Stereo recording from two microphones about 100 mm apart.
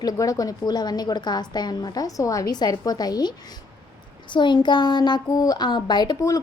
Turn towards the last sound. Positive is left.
turn(degrees=45)  # may be behind; listen again after turning